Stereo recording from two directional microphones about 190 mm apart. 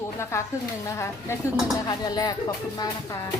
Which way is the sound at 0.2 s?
15° left (ahead or behind).